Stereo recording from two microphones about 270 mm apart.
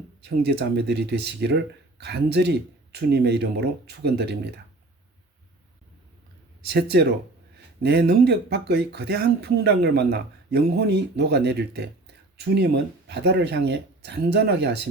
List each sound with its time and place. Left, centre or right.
0.2 s speech: right
6.7 s speech: right